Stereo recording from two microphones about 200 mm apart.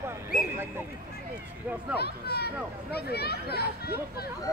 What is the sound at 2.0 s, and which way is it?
Speech, 55° left (ahead or behind).